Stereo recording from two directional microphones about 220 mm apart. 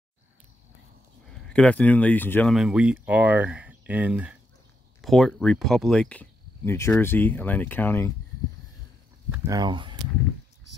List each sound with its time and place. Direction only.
1.5 s speech: 5° left (ahead or behind)
2.5 s speech: 5° right (ahead or behind)
9.3 s speech: 15° right (ahead or behind)